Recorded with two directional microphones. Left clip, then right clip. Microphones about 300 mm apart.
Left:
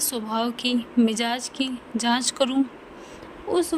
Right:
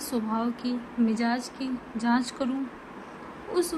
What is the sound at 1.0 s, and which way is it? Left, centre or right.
A woman's voice, left.